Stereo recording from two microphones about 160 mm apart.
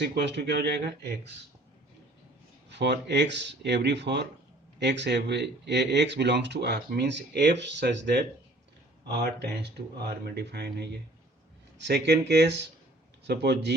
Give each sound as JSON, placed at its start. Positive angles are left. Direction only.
{"t": 0.0, "sound": "speech", "side_deg": -90}
{"t": 2.6, "sound": "speech", "side_deg": -90}